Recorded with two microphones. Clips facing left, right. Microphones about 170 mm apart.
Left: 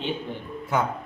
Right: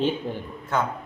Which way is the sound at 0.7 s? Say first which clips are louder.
Even; 10° left (ahead or behind).